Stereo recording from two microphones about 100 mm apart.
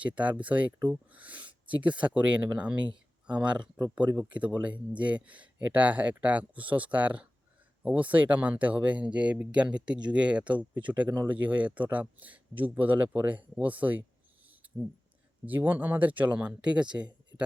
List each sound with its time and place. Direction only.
0.0 s speech: 15° right (ahead or behind)
15.4 s speech: 20° right (ahead or behind)